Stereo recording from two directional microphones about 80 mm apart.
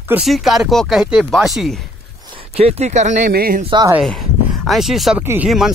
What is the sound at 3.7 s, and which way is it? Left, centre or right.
Speech, right.